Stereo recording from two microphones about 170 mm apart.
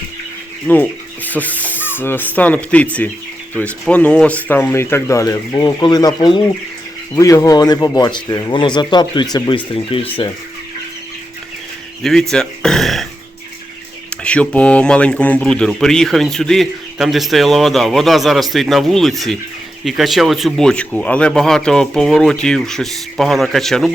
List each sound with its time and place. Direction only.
0.7 s speech: 10° left (ahead or behind)
1.3 s rub: 10° left (ahead or behind)
3.5 s speech: 10° left (ahead or behind); by 10.1 s 35° left (ahead or behind)
12.3 s a sound: 5° left (ahead or behind)
14.1 s speech: 5° left (ahead or behind)